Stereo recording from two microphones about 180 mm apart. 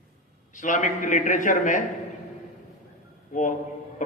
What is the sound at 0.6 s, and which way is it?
A man's voice, 45° left (ahead or behind).